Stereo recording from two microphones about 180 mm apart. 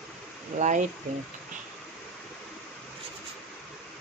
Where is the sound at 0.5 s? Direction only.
40° right (ahead or behind).